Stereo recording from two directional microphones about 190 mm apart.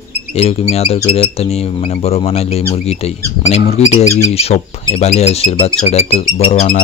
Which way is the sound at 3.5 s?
35° left (ahead or behind).